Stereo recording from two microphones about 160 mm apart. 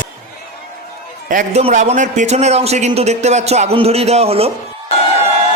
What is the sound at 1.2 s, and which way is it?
A man's voice, 55° right (ahead or behind).